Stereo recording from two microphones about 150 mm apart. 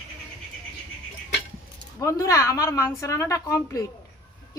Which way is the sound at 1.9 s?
20° left (ahead or behind).